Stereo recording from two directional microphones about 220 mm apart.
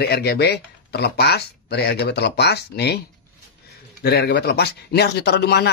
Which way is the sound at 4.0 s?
50° left (ahead or behind).